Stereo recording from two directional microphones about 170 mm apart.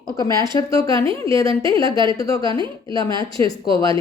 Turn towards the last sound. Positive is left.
turn(degrees=20)  # may be behind; listen again after turning